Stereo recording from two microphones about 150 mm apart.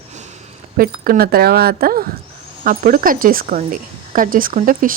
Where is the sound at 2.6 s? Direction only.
70° right (ahead or behind).